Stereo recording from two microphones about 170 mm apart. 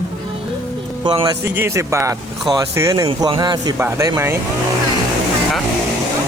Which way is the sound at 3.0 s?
30° right (ahead or behind).